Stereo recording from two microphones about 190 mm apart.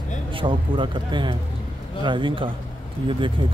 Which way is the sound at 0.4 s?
25° right (ahead or behind).